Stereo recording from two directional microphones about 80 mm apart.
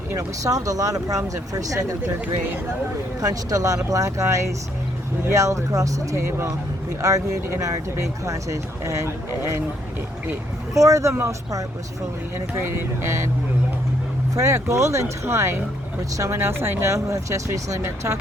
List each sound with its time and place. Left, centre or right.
0.4 s speech: right
3.2 s speech: right
8.2 s speech: right
10.8 s speech: right
12.6 s speech: right
14.3 s speech: right
16.4 s speech: right